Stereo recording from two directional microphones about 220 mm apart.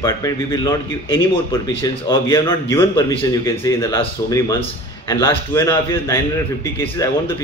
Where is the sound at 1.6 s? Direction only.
15° left (ahead or behind).